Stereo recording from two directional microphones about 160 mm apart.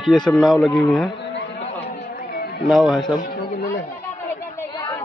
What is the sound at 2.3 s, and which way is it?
Music, 90° left.